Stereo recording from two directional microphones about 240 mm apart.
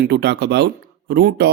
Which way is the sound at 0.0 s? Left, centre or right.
Right.